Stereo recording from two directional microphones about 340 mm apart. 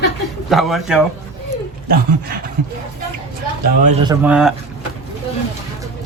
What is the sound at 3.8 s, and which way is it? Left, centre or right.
Speech, centre.